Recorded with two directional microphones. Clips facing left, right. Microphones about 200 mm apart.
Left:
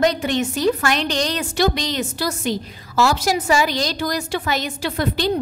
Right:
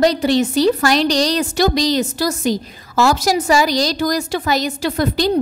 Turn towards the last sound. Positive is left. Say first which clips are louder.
# right 4 dB
turn(degrees=-40)  # may be behind; listen again after turning